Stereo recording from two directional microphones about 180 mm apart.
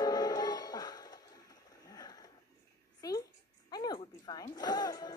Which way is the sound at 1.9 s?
20° left (ahead or behind).